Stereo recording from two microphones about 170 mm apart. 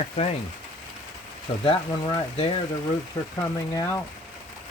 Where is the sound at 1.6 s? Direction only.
30° left (ahead or behind).